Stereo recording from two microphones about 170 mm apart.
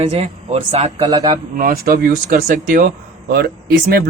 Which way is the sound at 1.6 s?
60° right (ahead or behind).